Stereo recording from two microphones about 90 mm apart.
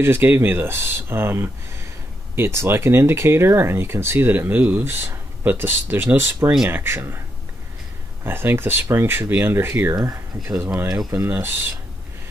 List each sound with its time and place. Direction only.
0.0 s speech: 25° right (ahead or behind)
8.2 s speech: 25° right (ahead or behind)